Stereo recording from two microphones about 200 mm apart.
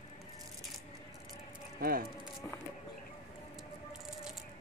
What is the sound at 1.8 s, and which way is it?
Speech, 45° right (ahead or behind).